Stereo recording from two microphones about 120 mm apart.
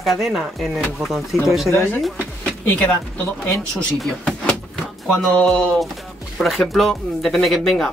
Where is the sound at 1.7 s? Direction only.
20° left (ahead or behind).